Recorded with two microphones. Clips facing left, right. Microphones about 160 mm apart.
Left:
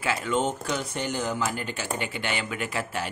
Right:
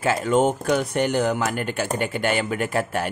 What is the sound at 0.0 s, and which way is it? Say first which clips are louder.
Speech: right 7 dB; 45° right (ahead or behind).